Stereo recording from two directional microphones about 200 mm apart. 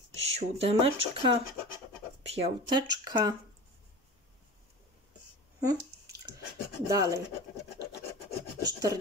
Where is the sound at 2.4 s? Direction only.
20° right (ahead or behind).